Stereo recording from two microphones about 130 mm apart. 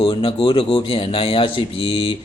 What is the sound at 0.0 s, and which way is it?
A man's voice, 40° left (ahead or behind).